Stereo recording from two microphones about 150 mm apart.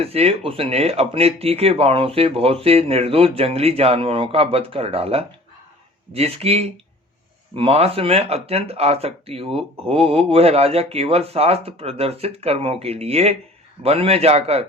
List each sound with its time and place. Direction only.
0.0 s a man's voice: 40° right (ahead or behind)